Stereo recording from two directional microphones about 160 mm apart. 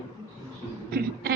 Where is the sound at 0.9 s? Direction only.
75° right (ahead or behind).